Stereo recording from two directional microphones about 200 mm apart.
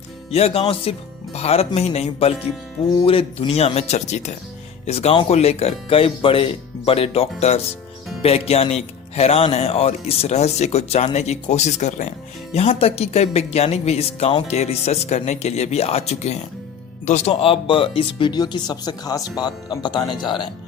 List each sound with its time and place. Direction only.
0.3 s speech: 30° left (ahead or behind)